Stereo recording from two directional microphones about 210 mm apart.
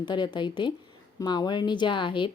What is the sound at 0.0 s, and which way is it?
A woman's voice, 20° left (ahead or behind).